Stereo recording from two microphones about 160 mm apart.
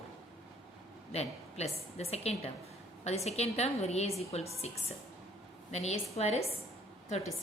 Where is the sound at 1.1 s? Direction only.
40° left (ahead or behind).